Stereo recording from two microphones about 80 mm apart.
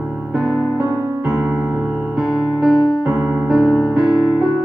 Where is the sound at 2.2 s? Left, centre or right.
Centre.